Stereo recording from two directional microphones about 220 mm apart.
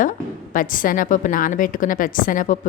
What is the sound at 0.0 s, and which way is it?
A woman's voice, 35° left (ahead or behind).